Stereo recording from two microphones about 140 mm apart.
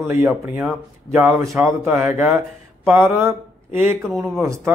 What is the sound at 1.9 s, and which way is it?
Mantra, 15° right (ahead or behind).